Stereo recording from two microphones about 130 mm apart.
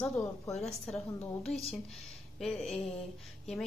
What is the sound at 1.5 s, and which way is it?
Speech, 50° left (ahead or behind).